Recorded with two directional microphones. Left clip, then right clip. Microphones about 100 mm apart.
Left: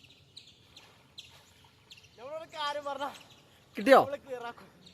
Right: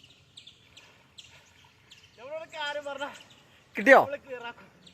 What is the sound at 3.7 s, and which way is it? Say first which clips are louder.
Speech: right 3 dB; 5° left (ahead or behind).